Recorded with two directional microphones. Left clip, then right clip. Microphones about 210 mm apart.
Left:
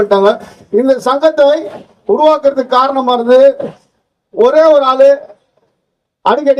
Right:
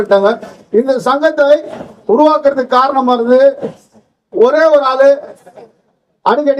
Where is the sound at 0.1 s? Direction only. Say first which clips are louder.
Left 1 dB; 40° left (ahead or behind).